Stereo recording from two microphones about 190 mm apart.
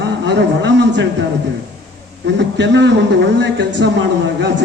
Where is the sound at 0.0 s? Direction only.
65° right (ahead or behind).